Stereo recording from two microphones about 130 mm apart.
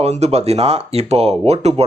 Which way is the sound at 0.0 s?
55° right (ahead or behind).